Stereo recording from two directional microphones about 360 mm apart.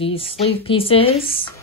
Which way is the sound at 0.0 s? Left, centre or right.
Centre.